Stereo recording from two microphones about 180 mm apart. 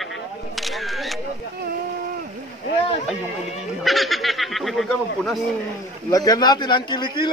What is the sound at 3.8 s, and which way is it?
Snicker, centre (ahead or behind).